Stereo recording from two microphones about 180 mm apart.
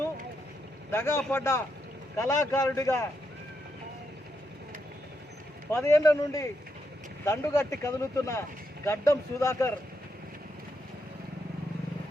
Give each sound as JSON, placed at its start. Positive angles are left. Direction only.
{"t": 0.9, "sound": "speech", "side_deg": 15}
{"t": 5.8, "sound": "speech", "side_deg": 15}